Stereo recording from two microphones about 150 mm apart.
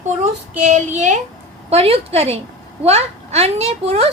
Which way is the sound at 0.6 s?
55° right (ahead or behind).